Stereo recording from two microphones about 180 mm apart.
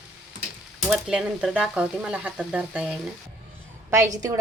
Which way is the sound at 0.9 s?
5° right (ahead or behind).